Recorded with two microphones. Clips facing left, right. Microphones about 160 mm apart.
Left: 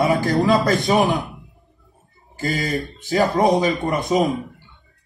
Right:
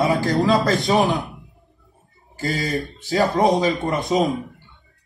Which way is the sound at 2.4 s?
20° left (ahead or behind).